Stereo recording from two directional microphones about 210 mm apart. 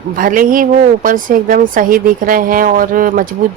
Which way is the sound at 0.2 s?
40° right (ahead or behind).